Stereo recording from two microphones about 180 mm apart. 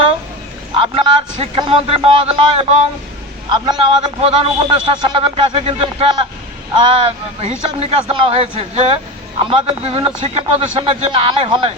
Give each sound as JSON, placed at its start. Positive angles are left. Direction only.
{"t": 0.8, "sound": "a man's voice", "side_deg": -30}